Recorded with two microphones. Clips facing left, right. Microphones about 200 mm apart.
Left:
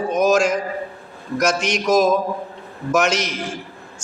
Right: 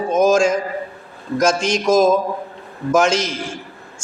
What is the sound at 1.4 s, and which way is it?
A man's voice, 30° right (ahead or behind).